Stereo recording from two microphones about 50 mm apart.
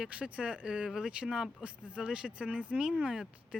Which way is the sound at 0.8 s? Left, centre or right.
Centre.